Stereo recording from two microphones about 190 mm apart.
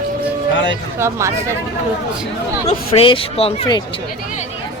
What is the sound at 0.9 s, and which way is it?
Speech, 15° right (ahead or behind).